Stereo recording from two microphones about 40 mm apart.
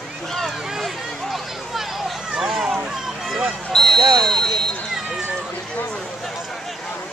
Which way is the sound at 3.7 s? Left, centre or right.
Centre.